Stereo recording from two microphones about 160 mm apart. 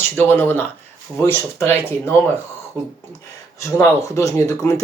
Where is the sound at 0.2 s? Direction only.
10° left (ahead or behind).